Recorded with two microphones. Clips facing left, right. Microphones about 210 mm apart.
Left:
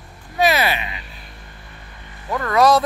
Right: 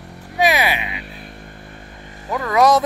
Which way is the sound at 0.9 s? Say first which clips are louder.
Right 6 dB; 55° right (ahead or behind).